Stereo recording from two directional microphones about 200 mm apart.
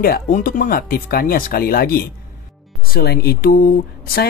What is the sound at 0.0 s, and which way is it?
Speech, 45° left (ahead or behind).